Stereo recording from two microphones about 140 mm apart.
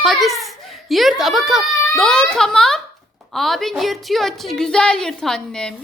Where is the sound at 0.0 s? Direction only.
Centre (ahead or behind).